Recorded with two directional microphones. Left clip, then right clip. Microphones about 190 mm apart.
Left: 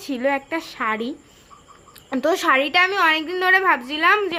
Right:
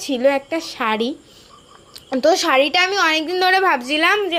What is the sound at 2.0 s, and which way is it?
A woman's voice, 5° right (ahead or behind).